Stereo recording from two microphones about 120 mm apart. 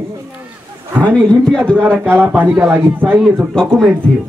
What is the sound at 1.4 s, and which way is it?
Speech, 5° left (ahead or behind).